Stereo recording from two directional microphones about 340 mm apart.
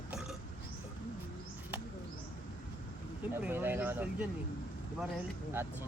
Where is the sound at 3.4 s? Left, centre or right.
Centre.